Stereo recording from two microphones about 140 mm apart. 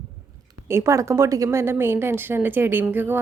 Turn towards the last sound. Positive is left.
turn(degrees=-15)  # may be behind; listen again after turning